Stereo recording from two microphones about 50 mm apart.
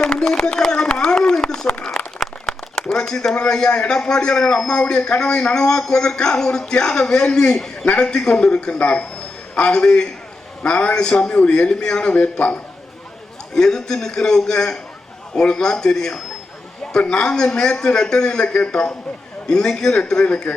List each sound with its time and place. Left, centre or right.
0.0 s a sound: centre
2.1 s speech: centre; by 12.5 s left
13.5 s speech: centre